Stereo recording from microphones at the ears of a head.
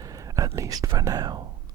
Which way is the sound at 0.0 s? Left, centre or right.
Right.